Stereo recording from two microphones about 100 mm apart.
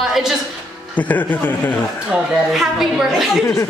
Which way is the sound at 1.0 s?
15° left (ahead or behind).